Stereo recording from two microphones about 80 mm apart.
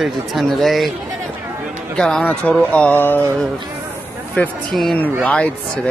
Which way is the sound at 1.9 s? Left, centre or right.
Centre.